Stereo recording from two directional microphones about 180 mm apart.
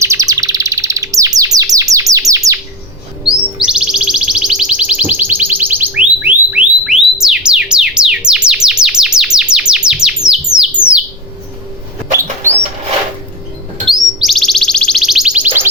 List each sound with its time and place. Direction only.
0.0 s bird: 15° right (ahead or behind)
3.2 s music: 5° right (ahead or behind)
10.5 s bird: 5° right (ahead or behind)
13.8 s bird: centre (ahead or behind)